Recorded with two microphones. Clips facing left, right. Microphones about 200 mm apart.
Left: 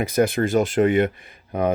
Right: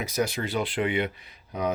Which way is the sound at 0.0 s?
55° left (ahead or behind).